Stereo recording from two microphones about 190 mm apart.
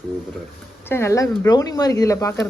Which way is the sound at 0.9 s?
15° left (ahead or behind).